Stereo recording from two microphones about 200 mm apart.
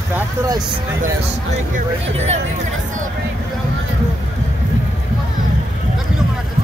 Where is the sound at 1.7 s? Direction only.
35° right (ahead or behind).